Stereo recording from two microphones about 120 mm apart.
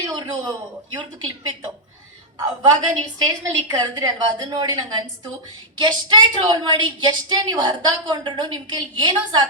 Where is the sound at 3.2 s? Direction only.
30° right (ahead or behind).